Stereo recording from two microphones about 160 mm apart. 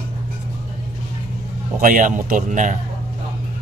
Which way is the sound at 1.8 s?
60° right (ahead or behind).